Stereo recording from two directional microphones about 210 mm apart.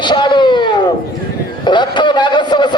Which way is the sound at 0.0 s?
20° left (ahead or behind).